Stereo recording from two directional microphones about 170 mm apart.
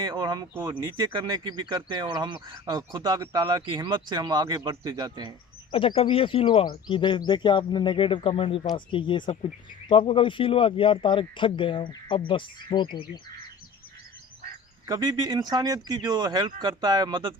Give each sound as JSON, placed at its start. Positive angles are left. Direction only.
{"t": 0.0, "sound": "speech", "side_deg": -25}
{"t": 5.7, "sound": "a man's voice", "side_deg": 30}
{"t": 14.8, "sound": "speech", "side_deg": -20}